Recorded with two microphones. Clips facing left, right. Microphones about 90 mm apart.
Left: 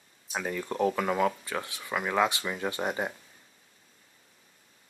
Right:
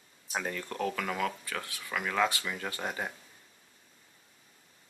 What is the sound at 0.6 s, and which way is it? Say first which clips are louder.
Speech: left 6 dB; 20° left (ahead or behind).